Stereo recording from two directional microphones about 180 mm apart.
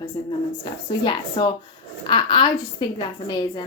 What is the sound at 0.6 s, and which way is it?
A woman's voice, 25° left (ahead or behind).